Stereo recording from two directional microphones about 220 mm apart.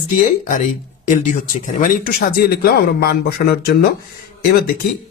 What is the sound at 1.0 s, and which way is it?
Speech, 35° left (ahead or behind).